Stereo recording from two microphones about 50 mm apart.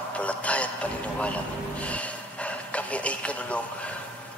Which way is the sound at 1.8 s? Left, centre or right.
Left.